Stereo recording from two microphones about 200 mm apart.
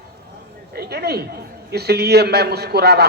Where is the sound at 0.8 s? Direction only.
55° right (ahead or behind).